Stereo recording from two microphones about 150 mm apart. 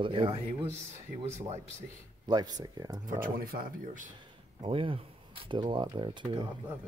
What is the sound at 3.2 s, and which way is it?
Speech, 75° right (ahead or behind).